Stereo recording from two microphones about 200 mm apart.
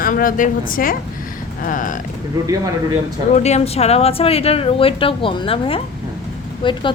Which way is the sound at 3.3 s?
35° left (ahead or behind).